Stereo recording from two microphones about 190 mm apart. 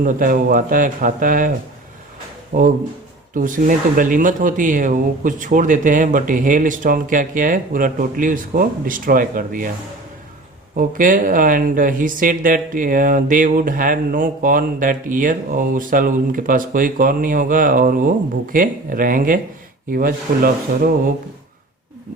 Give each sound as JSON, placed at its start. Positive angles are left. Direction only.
{"t": 0.0, "sound": "speech", "side_deg": -45}
{"t": 10.8, "sound": "speech", "side_deg": -45}